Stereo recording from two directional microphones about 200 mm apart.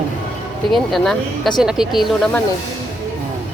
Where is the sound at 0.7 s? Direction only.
Centre (ahead or behind).